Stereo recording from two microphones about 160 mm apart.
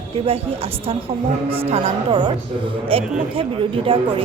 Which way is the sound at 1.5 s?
35° right (ahead or behind).